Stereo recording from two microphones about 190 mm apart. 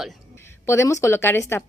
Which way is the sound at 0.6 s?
15° left (ahead or behind).